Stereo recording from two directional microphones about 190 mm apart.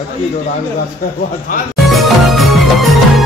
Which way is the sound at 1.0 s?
50° left (ahead or behind).